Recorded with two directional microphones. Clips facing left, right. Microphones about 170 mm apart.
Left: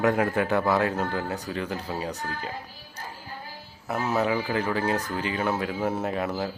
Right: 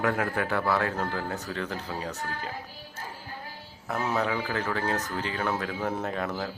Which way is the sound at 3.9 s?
5° left (ahead or behind).